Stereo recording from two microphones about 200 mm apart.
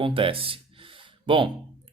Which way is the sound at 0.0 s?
25° right (ahead or behind).